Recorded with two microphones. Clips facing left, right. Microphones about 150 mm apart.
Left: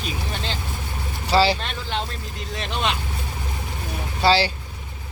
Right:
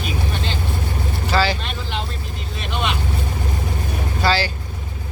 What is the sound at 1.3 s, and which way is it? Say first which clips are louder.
Speech: left 2 dB; 30° left (ahead or behind).